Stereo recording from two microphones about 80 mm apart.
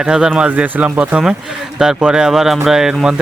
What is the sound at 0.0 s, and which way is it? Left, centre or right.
Speech, centre.